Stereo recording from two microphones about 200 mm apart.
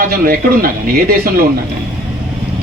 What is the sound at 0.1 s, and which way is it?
Speech, 45° right (ahead or behind).